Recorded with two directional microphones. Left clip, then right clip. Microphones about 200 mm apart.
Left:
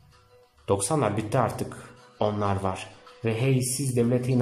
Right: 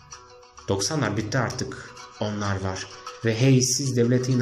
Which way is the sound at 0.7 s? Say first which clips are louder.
Left 1 dB; 15° left (ahead or behind).